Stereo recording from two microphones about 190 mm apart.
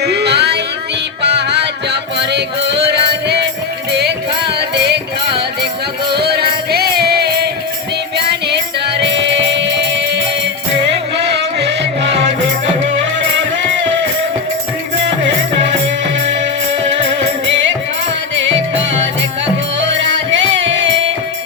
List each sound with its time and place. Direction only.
0.0 s a sound: 60° right (ahead or behind)
1.2 s music: 60° right (ahead or behind)
6.1 s music: 60° right (ahead or behind)
19.8 s music: 75° right (ahead or behind)